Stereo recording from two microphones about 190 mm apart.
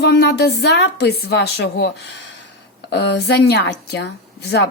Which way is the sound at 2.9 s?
60° left (ahead or behind).